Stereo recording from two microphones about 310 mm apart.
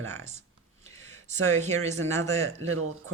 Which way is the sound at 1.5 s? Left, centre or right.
Right.